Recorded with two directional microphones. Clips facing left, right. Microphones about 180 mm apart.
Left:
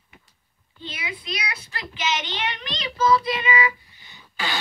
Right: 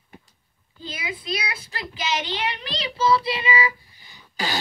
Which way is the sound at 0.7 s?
30° right (ahead or behind).